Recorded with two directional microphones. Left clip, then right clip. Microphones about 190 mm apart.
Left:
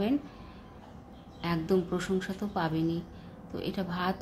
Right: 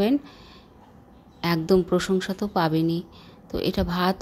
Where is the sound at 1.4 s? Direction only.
45° right (ahead or behind).